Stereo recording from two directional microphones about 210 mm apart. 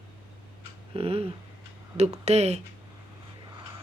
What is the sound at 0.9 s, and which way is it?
Speech, 25° right (ahead or behind).